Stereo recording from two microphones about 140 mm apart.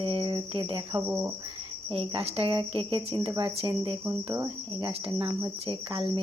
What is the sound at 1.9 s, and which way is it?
Cricket, 40° right (ahead or behind).